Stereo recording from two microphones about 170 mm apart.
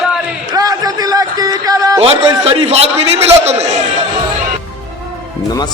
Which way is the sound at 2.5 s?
35° right (ahead or behind).